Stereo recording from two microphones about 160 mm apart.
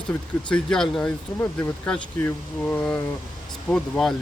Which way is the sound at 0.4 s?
5° left (ahead or behind).